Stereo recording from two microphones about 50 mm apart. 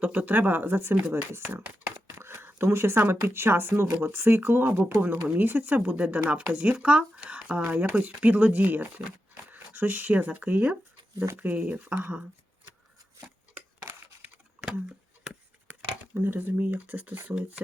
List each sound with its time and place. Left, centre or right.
0.0 s speech: right
2.0 s a sound: right
3.2 s speech: right
16.1 s speech: right